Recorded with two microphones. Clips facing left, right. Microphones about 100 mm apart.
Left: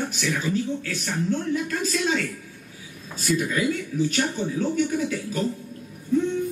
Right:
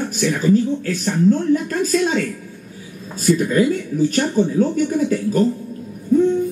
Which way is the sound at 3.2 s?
45° right (ahead or behind).